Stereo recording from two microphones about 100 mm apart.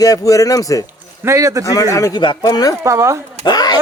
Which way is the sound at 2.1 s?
50° left (ahead or behind).